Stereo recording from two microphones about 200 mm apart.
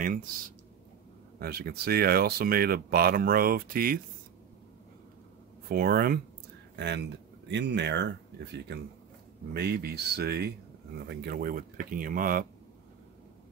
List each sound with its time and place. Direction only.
1.4 s speech: 50° right (ahead or behind)
5.7 s speech: 50° right (ahead or behind)